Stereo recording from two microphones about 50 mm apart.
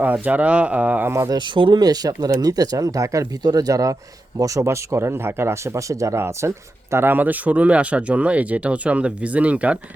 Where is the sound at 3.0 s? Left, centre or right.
Right.